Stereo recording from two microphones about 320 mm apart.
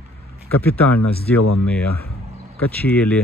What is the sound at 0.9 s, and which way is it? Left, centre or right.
Speech, left.